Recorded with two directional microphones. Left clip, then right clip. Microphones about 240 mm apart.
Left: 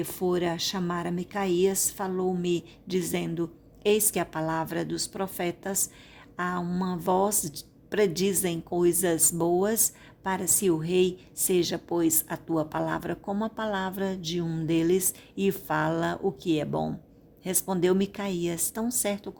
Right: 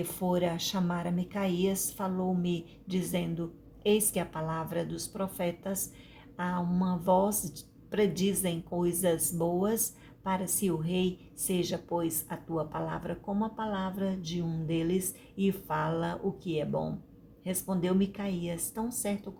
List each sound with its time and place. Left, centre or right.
0.0 s a woman's voice: left